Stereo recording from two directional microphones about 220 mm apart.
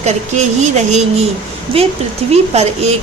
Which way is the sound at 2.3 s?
30° right (ahead or behind).